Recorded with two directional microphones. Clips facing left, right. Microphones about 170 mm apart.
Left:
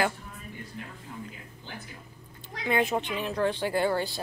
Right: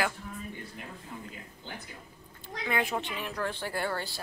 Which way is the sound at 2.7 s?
25° left (ahead or behind).